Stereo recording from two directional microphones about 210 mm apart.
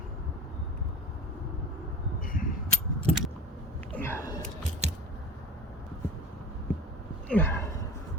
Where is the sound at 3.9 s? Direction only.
10° left (ahead or behind).